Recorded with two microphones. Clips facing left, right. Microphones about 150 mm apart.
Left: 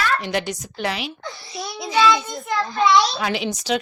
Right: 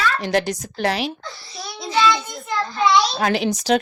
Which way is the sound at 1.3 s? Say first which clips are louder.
Left 3 dB; 20° left (ahead or behind).